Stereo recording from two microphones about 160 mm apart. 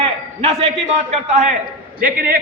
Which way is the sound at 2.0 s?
65° right (ahead or behind).